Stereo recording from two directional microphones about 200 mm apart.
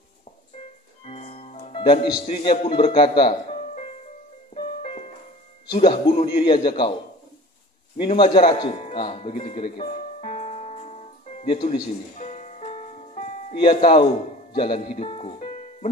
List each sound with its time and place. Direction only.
1.0 s music: 30° left (ahead or behind)
5.8 s a man's voice: 30° left (ahead or behind)
8.0 s a man's voice: 25° left (ahead or behind)
10.2 s music: 35° left (ahead or behind)